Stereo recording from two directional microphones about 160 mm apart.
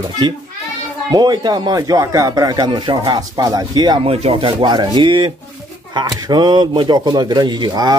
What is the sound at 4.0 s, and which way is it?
Speech, 40° right (ahead or behind).